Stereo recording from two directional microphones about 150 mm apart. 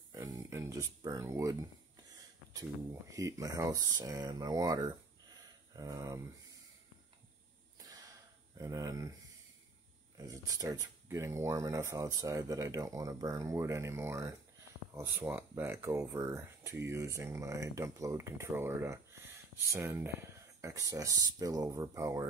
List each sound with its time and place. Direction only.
0.1 s a sound: 20° right (ahead or behind)
2.5 s speech: 20° right (ahead or behind)
8.5 s speech: 25° right (ahead or behind)
10.1 s speech: 25° right (ahead or behind)